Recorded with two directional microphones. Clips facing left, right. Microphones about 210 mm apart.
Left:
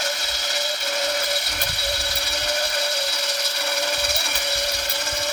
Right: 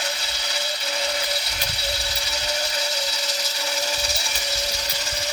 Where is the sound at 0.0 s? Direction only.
50° left (ahead or behind).